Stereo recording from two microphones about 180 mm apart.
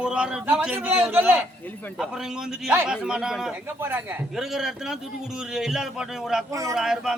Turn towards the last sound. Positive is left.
turn(degrees=0)  # may be behind; listen again after turning